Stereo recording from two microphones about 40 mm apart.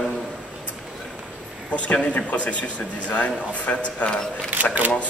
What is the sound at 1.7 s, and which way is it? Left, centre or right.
A man's voice, left.